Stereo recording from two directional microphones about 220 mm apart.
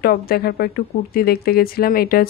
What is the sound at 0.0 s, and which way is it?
Speech, 45° left (ahead or behind).